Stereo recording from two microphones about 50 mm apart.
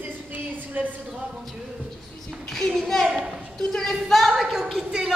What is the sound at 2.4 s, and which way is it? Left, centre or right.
Speech, centre.